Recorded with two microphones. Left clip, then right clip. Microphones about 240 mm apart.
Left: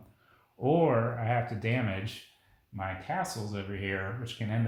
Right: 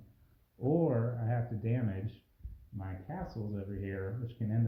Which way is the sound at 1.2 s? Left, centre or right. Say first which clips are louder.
Left 8 dB; left.